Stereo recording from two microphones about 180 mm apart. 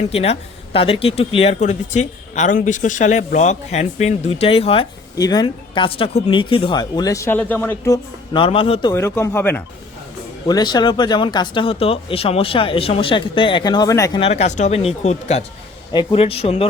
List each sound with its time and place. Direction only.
0.1 s speech: 35° left (ahead or behind)
5.1 s speech: 20° left (ahead or behind)
8.3 s speech: 30° left (ahead or behind)
8.9 s speech: 15° left (ahead or behind)
10.4 s speech: 25° left (ahead or behind)
14.2 s speech: 35° left (ahead or behind)